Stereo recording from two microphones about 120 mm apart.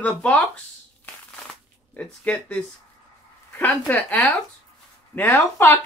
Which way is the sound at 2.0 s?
15° left (ahead or behind).